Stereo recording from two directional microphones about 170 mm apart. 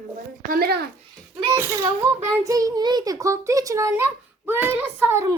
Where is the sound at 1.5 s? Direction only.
15° right (ahead or behind).